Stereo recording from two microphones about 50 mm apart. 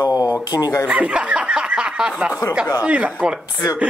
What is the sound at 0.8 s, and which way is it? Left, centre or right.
Snicker, right.